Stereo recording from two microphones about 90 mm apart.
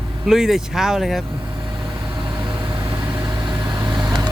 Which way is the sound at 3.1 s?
60° right (ahead or behind).